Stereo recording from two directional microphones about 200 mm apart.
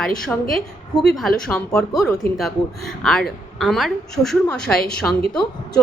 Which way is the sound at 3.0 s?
5° left (ahead or behind).